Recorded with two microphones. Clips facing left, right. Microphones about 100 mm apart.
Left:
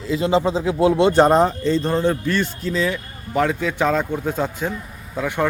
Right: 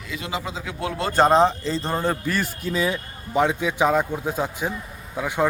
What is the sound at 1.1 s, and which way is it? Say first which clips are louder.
A man's voice: left 2 dB; 10° left (ahead or behind).